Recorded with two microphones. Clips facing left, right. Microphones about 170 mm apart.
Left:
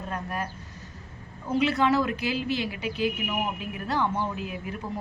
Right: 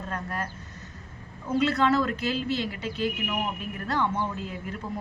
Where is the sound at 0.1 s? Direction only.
15° left (ahead or behind).